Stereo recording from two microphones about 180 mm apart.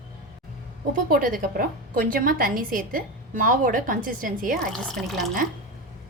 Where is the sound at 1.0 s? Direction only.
50° right (ahead or behind).